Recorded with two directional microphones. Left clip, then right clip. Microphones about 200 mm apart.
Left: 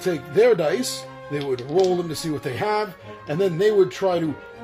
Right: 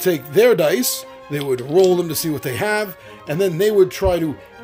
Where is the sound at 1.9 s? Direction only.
45° right (ahead or behind).